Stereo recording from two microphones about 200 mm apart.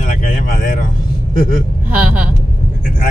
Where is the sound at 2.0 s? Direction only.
5° right (ahead or behind).